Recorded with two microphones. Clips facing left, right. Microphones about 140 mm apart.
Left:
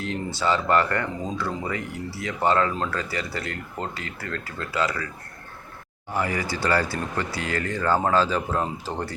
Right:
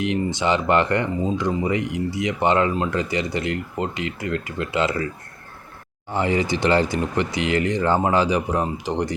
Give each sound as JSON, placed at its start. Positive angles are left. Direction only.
{"t": 0.3, "sound": "speech", "side_deg": -20}
{"t": 6.1, "sound": "speech", "side_deg": -25}